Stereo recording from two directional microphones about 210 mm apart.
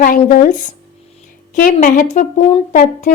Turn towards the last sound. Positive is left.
turn(degrees=40)  # may be behind; listen again after turning